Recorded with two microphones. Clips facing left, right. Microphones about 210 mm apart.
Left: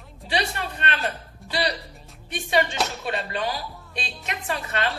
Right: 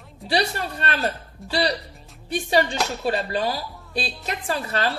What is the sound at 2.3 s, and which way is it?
Speech, 35° right (ahead or behind).